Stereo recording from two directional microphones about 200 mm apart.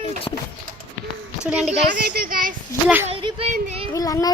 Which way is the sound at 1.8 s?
50° right (ahead or behind).